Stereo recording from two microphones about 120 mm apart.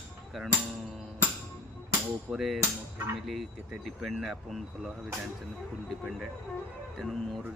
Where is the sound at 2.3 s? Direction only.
Centre (ahead or behind).